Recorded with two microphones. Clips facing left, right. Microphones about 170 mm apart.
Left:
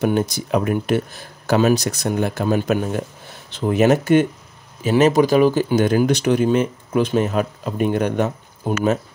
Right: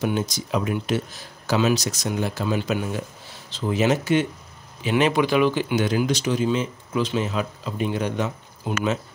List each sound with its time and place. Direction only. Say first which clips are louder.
0.0 s speech: left 5 dB; 55° left (ahead or behind)
4.8 s speech: left 6 dB; 40° left (ahead or behind)